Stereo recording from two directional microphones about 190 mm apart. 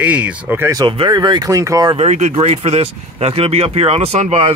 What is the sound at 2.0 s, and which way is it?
Speech, 35° right (ahead or behind).